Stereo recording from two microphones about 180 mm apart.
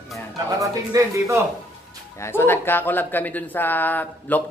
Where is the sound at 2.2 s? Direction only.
15° left (ahead or behind).